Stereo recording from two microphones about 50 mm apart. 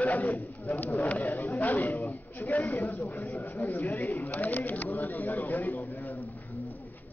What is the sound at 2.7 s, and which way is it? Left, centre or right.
Speech, left.